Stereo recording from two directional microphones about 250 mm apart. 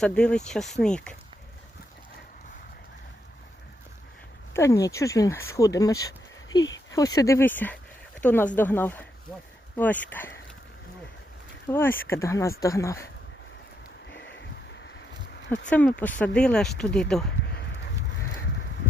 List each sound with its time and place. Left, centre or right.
0.0 s speech: centre
4.5 s speech: centre
11.7 s speech: centre
15.7 s speech: centre
17.4 s a sound: left